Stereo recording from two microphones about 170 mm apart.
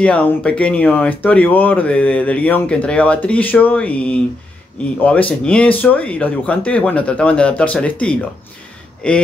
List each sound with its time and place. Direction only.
0.0 s speech: 10° left (ahead or behind)
5.4 s speech: 5° left (ahead or behind)